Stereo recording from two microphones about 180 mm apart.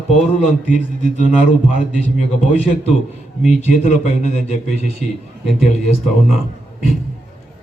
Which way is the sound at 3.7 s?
40° left (ahead or behind).